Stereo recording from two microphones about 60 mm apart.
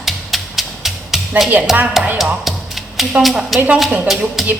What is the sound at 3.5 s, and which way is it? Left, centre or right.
Speech, right.